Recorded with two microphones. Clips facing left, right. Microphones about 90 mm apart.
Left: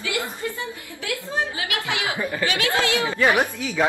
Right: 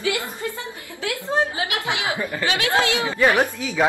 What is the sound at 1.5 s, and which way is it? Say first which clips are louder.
A man's voice: right 2 dB; 25° right (ahead or behind).